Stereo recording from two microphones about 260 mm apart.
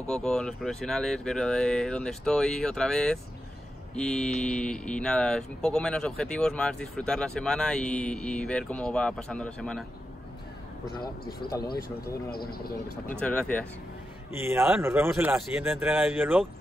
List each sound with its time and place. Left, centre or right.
0.0 s speech: centre
11.7 s speech: left
13.2 s speech: centre
14.3 s speech: centre